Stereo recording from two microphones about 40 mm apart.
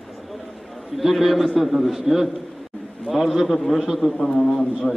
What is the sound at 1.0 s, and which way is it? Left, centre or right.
A man's voice, centre.